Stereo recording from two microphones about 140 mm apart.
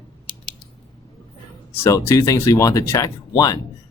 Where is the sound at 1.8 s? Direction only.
20° left (ahead or behind).